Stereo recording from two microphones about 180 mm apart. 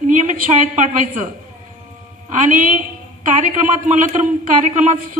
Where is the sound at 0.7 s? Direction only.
45° right (ahead or behind).